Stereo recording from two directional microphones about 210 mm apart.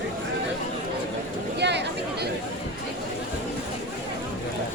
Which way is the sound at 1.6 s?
55° right (ahead or behind).